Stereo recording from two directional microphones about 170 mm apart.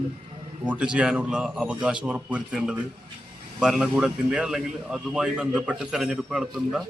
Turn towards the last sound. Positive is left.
turn(degrees=-5)  # may be behind; listen again after turning